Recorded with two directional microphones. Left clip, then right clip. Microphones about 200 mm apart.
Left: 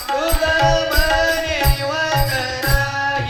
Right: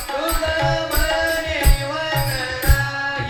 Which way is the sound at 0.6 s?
35° left (ahead or behind).